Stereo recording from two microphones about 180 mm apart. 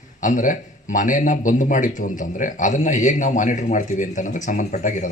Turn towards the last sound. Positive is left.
turn(degrees=45)  # may be behind; listen again after turning